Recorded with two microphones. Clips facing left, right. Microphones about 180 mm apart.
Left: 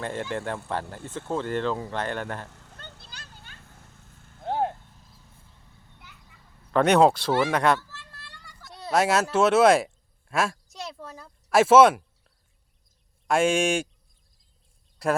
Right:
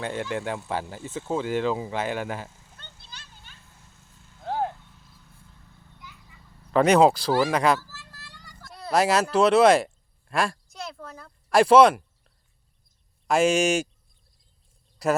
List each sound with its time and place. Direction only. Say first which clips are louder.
0.0 s speech: right 1 dB; centre (ahead or behind)
2.5 s a sound: left 4 dB; 65° left (ahead or behind)
3.8 s vehicle: left 3 dB; 55° left (ahead or behind)
4.4 s vehicle: left 1 dB; 25° left (ahead or behind)
6.0 s a sound: right 5 dB; 60° left (ahead or behind)
6.7 s a child's voice: right 1 dB; centre (ahead or behind)